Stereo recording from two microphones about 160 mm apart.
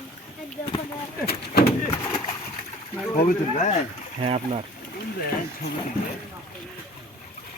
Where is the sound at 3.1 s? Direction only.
55° left (ahead or behind).